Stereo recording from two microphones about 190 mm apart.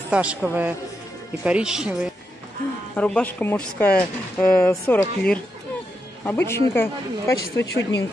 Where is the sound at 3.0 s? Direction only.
5° left (ahead or behind).